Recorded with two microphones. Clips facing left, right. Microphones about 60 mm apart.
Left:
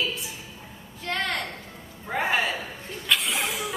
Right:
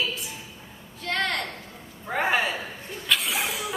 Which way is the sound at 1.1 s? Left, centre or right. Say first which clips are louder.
Right 1 dB; centre.